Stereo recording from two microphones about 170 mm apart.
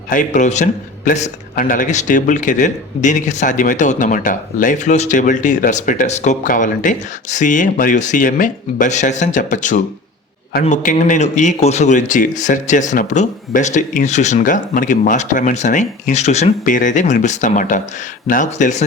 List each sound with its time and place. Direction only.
0.1 s a man's voice: 45° left (ahead or behind)